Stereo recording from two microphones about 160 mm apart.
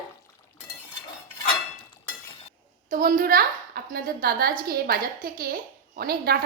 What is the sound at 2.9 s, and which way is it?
A woman's voice, 65° right (ahead or behind).